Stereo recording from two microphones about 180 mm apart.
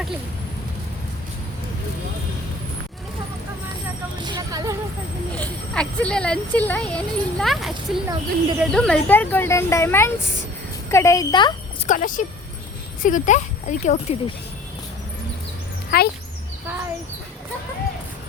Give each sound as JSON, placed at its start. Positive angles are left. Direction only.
{"t": 4.2, "sound": "music", "side_deg": -20}
{"t": 5.3, "sound": "speech", "side_deg": 5}
{"t": 11.9, "sound": "speech", "side_deg": 45}
{"t": 15.9, "sound": "speech", "side_deg": 55}